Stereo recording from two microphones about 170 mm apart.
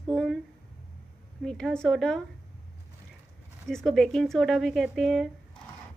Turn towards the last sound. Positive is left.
turn(degrees=0)  # may be behind; listen again after turning